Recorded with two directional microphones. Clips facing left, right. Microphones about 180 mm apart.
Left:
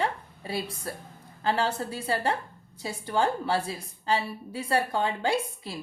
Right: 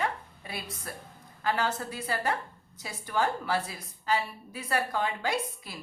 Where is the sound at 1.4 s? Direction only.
30° left (ahead or behind).